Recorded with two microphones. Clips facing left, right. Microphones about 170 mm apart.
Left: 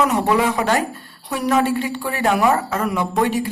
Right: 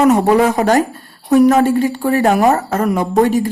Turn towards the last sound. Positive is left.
turn(degrees=-45)  # may be behind; listen again after turning